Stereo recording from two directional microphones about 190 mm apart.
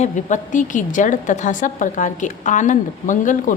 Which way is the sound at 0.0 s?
40° left (ahead or behind).